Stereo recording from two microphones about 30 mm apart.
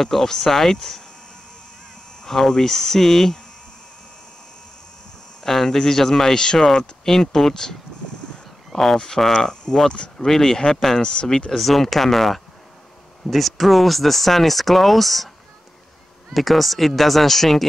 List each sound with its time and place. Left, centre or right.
0.0 s speech: centre
2.2 s speech: centre
5.4 s speech: centre
8.7 s speech: centre
11.5 s speech: centre
16.3 s speech: centre